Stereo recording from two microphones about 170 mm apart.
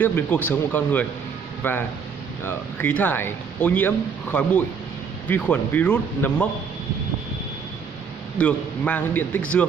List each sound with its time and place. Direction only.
0.0 s a man's voice: 10° left (ahead or behind)
8.4 s a man's voice: 5° left (ahead or behind)